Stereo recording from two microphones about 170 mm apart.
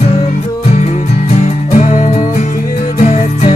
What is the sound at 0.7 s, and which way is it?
Music, 40° left (ahead or behind).